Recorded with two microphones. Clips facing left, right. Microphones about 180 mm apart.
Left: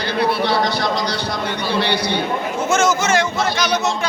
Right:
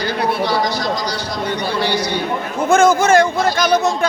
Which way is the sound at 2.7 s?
55° right (ahead or behind).